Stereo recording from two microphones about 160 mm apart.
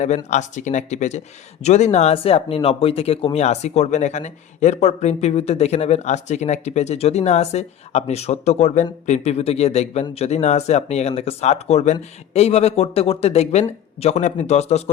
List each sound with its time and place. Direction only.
0.3 s speech: 50° left (ahead or behind)